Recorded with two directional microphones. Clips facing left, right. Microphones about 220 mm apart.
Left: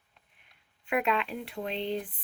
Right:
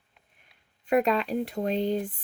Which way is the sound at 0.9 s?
40° right (ahead or behind).